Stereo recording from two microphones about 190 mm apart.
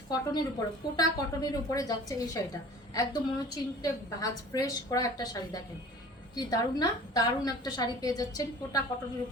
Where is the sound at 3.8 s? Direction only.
20° left (ahead or behind).